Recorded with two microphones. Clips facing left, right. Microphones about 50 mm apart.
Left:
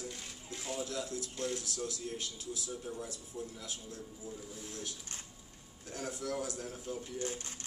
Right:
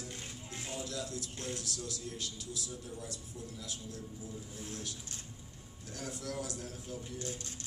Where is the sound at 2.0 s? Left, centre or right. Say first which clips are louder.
Left 2 dB; left.